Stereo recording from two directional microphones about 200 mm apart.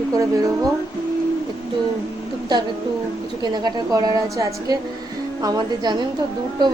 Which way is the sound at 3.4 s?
20° right (ahead or behind).